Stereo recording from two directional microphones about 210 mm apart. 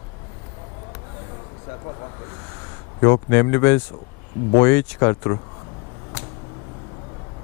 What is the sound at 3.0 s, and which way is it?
Speech, 15° left (ahead or behind).